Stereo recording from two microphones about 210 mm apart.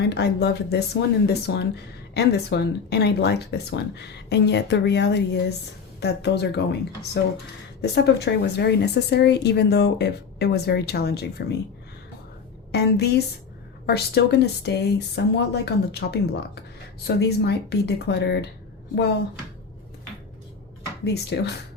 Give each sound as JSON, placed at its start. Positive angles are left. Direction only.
{"t": 0.0, "sound": "a woman's voice", "side_deg": 50}
{"t": 12.7, "sound": "a woman's voice", "side_deg": 50}
{"t": 21.0, "sound": "a woman's voice", "side_deg": 50}